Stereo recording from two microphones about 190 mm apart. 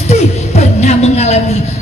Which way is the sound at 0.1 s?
35° left (ahead or behind).